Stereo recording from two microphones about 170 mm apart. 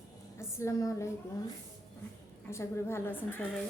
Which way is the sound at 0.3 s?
20° left (ahead or behind).